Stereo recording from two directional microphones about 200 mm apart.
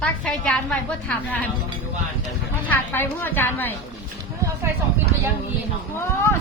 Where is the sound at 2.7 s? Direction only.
10° left (ahead or behind).